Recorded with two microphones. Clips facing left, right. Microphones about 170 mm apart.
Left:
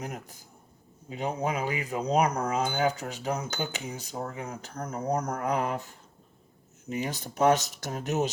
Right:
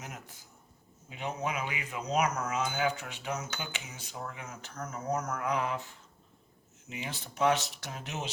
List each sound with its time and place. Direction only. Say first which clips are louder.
0.0 s speech: left 8 dB; 40° left (ahead or behind)